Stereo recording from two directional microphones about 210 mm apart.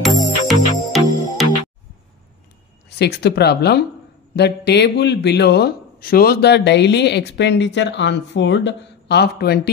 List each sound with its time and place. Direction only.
0.5 s music: centre (ahead or behind)
3.0 s speech: 50° left (ahead or behind)